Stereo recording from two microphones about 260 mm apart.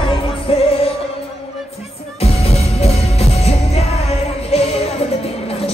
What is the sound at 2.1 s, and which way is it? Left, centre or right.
Music, left.